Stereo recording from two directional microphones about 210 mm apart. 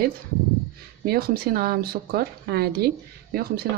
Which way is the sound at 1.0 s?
45° right (ahead or behind).